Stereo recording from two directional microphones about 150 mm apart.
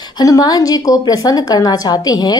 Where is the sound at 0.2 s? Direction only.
25° left (ahead or behind).